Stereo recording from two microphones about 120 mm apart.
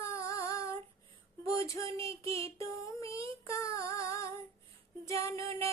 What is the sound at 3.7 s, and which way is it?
Female singing, 25° left (ahead or behind).